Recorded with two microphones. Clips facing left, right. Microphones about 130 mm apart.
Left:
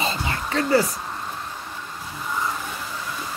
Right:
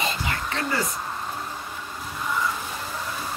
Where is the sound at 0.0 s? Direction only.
30° left (ahead or behind).